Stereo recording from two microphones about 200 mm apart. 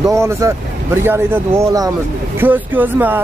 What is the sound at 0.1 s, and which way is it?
Speech, 15° right (ahead or behind).